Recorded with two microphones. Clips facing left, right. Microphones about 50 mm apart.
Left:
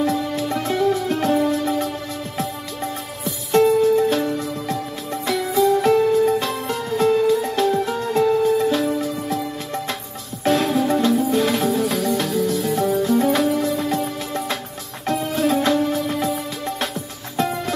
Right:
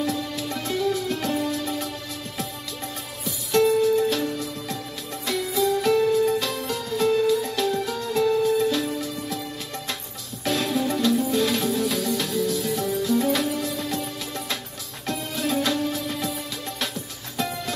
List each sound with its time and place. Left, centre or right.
0.0 s music: left
3.3 s music: left